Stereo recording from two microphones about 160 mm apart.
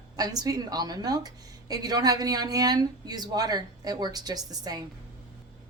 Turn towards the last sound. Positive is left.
turn(degrees=-25)  # may be behind; listen again after turning